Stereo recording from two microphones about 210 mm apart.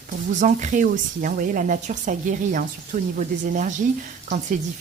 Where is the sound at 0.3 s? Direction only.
35° right (ahead or behind).